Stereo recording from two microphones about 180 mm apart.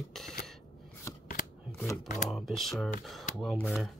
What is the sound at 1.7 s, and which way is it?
Speech, 15° left (ahead or behind).